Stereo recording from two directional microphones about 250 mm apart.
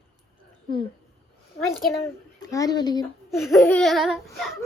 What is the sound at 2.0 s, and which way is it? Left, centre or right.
Speech, centre.